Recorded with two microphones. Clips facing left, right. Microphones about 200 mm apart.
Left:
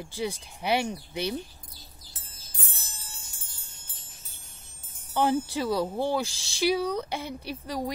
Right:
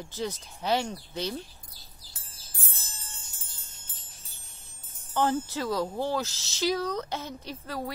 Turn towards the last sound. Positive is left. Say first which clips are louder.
# left 3 dB
turn(degrees=15)  # may be behind; listen again after turning